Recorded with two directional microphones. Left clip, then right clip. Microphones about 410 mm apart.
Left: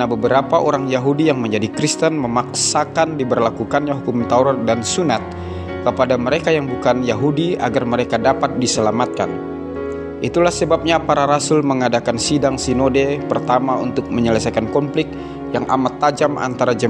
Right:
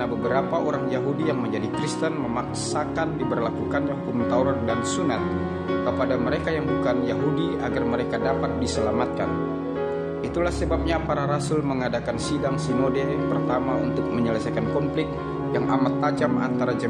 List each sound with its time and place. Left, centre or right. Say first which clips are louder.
0.0 s a man's voice: left 8 dB; centre
10.3 s a man's voice: left 11 dB; centre